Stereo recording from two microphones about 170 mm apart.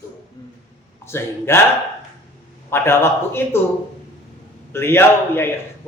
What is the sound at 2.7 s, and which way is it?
Speech, 15° left (ahead or behind).